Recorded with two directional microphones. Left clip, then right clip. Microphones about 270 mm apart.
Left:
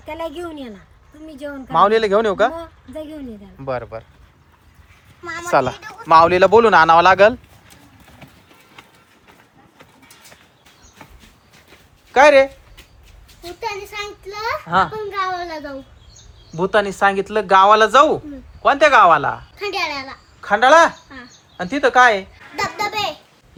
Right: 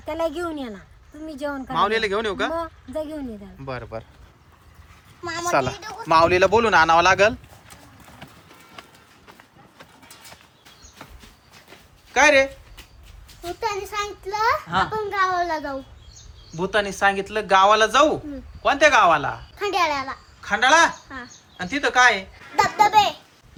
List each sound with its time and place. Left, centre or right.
0.1 s a child's voice: right
1.5 s speech: centre
5.5 s speech: centre
12.1 s speech: centre
13.4 s a child's voice: right
14.7 s speech: centre
16.6 s speech: centre
22.6 s a child's voice: right